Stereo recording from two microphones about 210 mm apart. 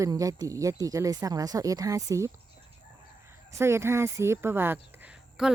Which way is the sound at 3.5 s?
15° right (ahead or behind).